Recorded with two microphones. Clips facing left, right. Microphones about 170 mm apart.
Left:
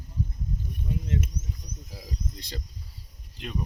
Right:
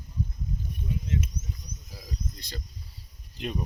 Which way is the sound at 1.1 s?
60° left (ahead or behind).